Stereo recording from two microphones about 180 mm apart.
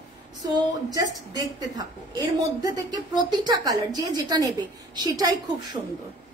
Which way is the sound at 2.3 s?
20° right (ahead or behind).